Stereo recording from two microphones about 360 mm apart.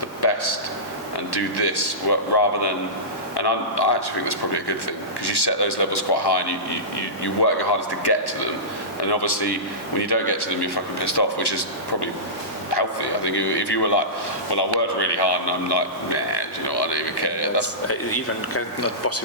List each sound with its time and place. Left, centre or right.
0.2 s a sound: left
1.3 s a man's voice: left
17.8 s speech: left